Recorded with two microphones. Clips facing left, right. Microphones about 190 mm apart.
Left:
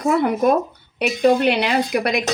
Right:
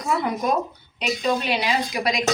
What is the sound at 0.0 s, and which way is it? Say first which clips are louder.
A woman's voice: left 7 dB; 55° left (ahead or behind).